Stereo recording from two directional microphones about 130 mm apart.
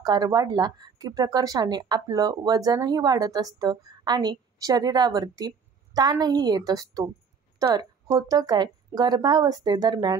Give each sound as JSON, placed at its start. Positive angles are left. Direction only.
{"t": 0.0, "sound": "a woman's voice", "side_deg": -30}